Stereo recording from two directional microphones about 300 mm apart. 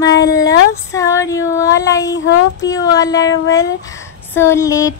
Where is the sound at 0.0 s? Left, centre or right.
Centre.